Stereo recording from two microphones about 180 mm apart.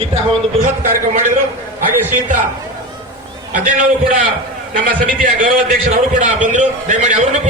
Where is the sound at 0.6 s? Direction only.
45° right (ahead or behind).